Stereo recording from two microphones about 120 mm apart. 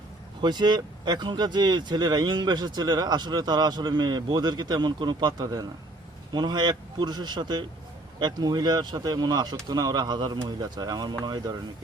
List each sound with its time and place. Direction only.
0.4 s speech: 40° right (ahead or behind)